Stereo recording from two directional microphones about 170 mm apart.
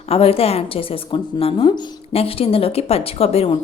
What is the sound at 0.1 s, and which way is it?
Speech, 35° left (ahead or behind).